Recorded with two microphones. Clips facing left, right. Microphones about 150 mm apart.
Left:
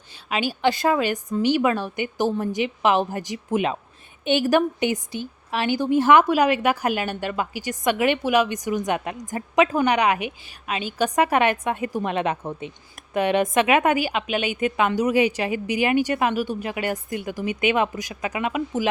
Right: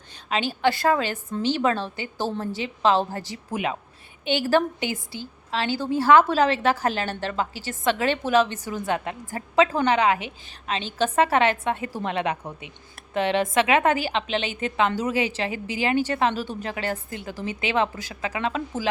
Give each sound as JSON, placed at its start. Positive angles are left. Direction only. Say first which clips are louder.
{"t": 0.3, "sound": "a woman's voice", "louder": "left 1 dB", "side_deg": 10}